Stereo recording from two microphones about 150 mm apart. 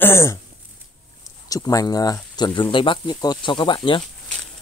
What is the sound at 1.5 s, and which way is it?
Speech, 25° left (ahead or behind).